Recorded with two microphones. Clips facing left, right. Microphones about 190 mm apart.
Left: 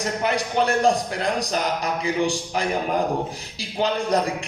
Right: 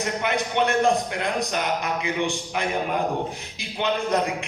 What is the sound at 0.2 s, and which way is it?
A man's voice, 35° left (ahead or behind).